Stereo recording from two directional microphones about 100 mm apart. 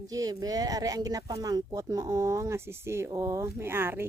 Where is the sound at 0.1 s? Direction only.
35° right (ahead or behind).